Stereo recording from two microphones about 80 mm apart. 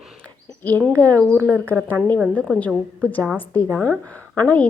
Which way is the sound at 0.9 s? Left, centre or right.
Centre.